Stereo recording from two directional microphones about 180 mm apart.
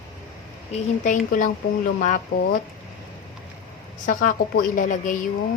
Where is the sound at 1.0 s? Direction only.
45° left (ahead or behind).